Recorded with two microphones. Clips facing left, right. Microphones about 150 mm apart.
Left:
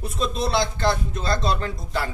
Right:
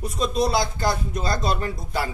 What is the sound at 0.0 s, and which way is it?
Speech, 40° right (ahead or behind).